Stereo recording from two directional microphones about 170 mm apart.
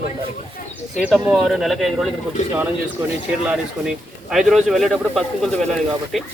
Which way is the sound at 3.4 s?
5° right (ahead or behind).